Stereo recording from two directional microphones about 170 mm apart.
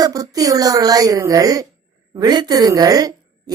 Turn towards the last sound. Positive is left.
turn(degrees=-20)  # may be behind; listen again after turning